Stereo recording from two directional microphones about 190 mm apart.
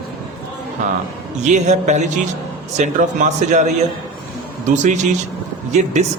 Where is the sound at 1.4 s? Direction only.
40° right (ahead or behind).